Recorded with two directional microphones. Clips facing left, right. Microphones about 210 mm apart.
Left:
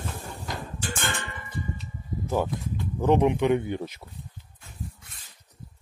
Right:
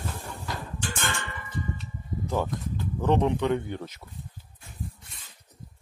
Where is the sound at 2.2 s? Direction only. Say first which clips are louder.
Left 2 dB; 10° left (ahead or behind).